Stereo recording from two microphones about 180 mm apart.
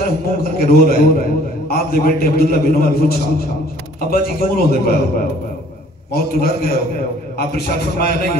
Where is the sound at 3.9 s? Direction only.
55° left (ahead or behind).